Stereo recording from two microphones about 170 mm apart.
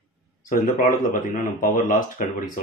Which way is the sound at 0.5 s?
50° left (ahead or behind).